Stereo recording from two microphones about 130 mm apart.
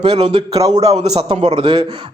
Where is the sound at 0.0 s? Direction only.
45° right (ahead or behind).